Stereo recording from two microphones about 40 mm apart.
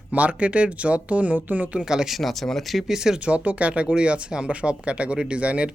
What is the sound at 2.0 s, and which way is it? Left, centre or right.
Speech, centre.